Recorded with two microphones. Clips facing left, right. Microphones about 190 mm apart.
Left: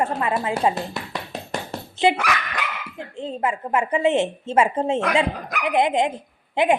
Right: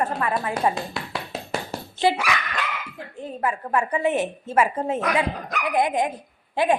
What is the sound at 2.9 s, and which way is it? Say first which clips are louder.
Speech: left 4 dB; 25° left (ahead or behind).